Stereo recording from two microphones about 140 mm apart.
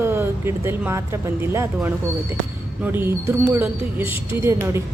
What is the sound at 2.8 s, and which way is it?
A woman's voice, 15° right (ahead or behind).